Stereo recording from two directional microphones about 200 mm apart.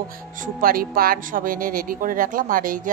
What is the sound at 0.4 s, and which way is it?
Speech, 45° right (ahead or behind).